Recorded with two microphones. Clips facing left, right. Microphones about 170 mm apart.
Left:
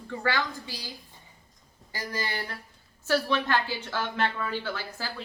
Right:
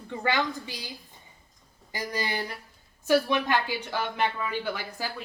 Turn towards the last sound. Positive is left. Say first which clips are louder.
# right 2 dB
turn(degrees=-15)  # may be behind; listen again after turning